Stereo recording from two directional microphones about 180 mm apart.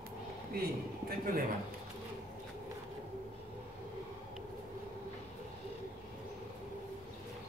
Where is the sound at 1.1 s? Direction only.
55° right (ahead or behind).